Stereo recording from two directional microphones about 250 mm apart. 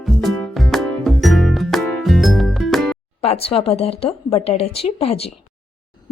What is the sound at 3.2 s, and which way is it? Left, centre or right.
Speech, left.